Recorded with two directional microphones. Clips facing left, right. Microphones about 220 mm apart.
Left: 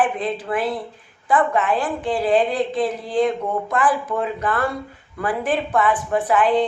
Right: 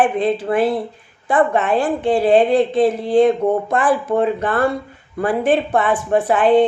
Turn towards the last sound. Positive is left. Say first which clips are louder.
# right 5 dB
turn(degrees=-30)  # may be behind; listen again after turning